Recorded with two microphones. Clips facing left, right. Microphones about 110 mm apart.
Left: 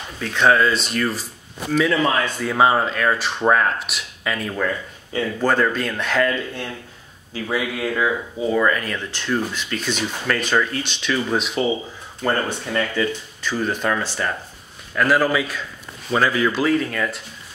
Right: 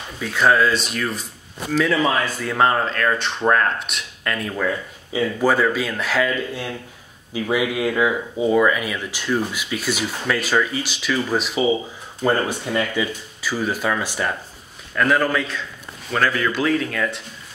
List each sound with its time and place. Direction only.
0.2 s speech: 5° right (ahead or behind)
15.0 s speech: 5° left (ahead or behind)